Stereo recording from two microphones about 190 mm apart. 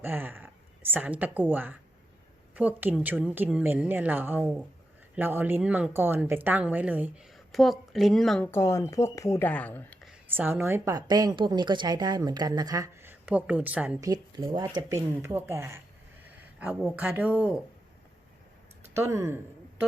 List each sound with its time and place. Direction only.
0.0 s speech: 10° right (ahead or behind)
8.4 s a woman's voice: 15° left (ahead or behind)
10.1 s a woman's voice: 10° right (ahead or behind)
14.0 s speech: 20° right (ahead or behind)
18.9 s speech: 15° right (ahead or behind)